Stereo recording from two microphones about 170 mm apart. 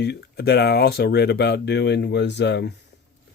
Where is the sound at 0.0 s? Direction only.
75° left (ahead or behind).